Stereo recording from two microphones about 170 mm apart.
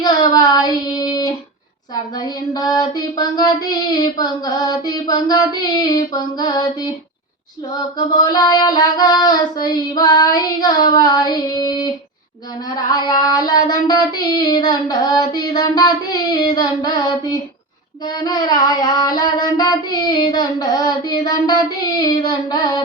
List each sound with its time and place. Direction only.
0.0 s child singing: 25° left (ahead or behind)
8.1 s child singing: 25° left (ahead or behind)